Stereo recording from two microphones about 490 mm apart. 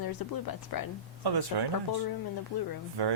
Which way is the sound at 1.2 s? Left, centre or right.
Right.